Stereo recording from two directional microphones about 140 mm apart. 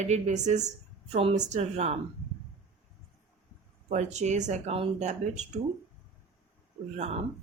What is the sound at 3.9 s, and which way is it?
Speech, 55° right (ahead or behind).